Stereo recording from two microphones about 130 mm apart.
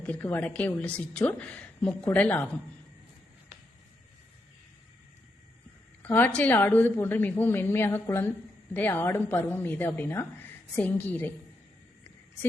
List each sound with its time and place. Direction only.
0.0 s a woman's voice: 15° left (ahead or behind)
6.0 s a woman's voice: 15° left (ahead or behind)